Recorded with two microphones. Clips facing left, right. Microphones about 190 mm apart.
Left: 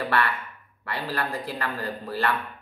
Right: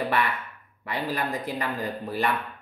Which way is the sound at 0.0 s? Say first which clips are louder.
Even; 15° right (ahead or behind).